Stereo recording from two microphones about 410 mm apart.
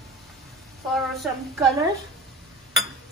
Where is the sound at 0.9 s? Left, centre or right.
Centre.